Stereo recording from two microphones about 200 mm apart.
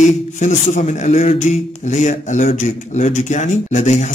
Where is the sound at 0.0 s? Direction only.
35° left (ahead or behind).